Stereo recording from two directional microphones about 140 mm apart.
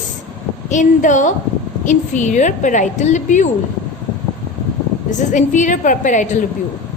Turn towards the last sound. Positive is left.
turn(degrees=60)  # may be behind; listen again after turning